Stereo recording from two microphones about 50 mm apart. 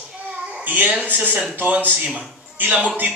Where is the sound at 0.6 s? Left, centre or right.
Right.